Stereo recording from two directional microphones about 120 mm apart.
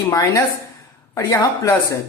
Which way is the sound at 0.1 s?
30° left (ahead or behind).